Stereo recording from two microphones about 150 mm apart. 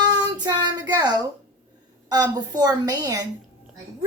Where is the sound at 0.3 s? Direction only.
30° right (ahead or behind).